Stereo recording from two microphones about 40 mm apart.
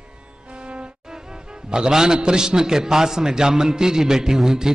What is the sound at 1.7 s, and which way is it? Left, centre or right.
A man's voice, centre.